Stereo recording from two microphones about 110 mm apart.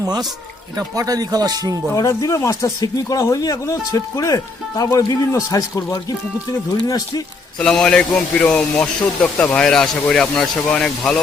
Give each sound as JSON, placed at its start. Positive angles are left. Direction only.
{"t": 0.0, "sound": "speech", "side_deg": -35}
{"t": 2.0, "sound": "speech", "side_deg": 30}
{"t": 7.6, "sound": "a man's voice", "side_deg": 5}